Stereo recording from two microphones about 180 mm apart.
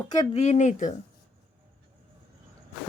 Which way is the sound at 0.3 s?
40° left (ahead or behind).